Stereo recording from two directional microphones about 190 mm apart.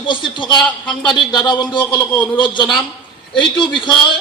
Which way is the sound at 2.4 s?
25° left (ahead or behind).